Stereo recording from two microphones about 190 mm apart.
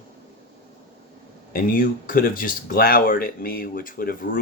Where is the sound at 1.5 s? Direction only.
50° left (ahead or behind).